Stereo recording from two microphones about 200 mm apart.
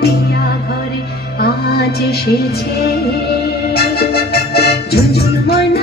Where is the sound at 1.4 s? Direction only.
50° left (ahead or behind).